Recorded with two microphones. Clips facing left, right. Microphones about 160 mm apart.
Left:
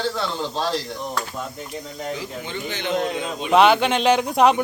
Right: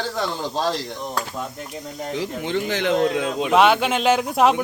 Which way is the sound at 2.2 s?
90° right.